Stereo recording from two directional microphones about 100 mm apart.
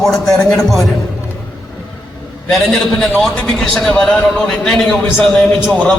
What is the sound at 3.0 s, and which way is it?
A man's voice, 5° left (ahead or behind).